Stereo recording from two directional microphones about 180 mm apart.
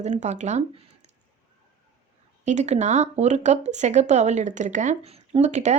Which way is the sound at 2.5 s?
40° right (ahead or behind).